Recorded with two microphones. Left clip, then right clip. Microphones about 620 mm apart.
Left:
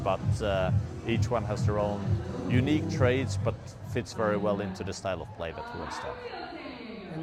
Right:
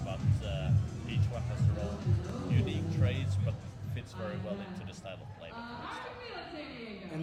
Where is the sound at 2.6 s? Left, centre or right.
Left.